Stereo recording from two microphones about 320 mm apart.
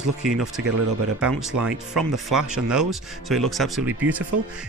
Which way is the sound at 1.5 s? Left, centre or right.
Right.